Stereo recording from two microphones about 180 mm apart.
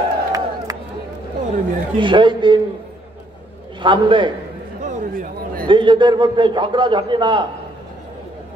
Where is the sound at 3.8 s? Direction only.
25° right (ahead or behind).